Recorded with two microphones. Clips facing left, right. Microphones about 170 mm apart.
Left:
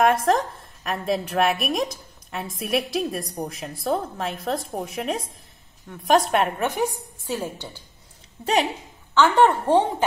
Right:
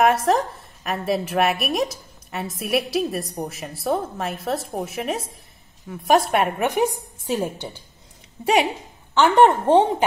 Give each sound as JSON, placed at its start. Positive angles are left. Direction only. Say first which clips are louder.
{"t": 0.0, "sound": "a woman's voice", "louder": "right 1 dB", "side_deg": -5}
{"t": 7.2, "sound": "a woman's voice", "louder": "right 4 dB", "side_deg": -20}
{"t": 9.1, "sound": "a woman's voice", "louder": "right 2 dB", "side_deg": -15}